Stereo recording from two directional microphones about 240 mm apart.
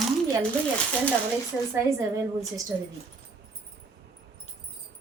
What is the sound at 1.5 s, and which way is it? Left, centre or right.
Speech, centre.